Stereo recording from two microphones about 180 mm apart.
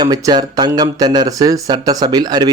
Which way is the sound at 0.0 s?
20° right (ahead or behind).